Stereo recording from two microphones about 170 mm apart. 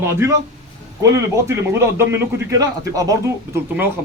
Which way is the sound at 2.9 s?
20° right (ahead or behind).